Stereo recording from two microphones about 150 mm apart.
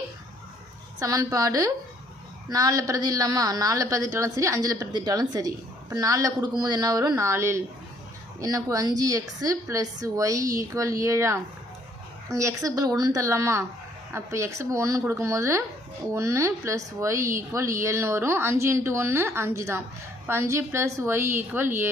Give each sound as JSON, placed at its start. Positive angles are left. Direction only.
{"t": 0.9, "sound": "a woman's voice", "side_deg": -20}